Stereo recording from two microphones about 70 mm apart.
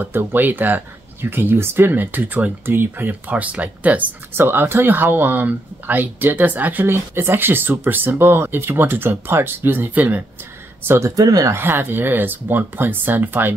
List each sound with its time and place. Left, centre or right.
0.0 s speech: right
11.1 s speech: right
11.5 s speech: right